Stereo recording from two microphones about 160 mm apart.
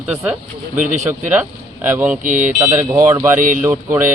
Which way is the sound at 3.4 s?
55° right (ahead or behind).